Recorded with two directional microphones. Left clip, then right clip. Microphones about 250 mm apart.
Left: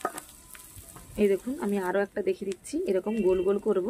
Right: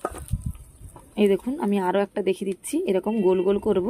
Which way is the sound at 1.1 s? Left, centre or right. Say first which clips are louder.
Right 4 dB; right.